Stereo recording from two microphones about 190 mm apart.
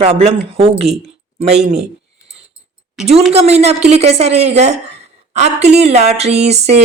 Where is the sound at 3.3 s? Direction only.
35° right (ahead or behind).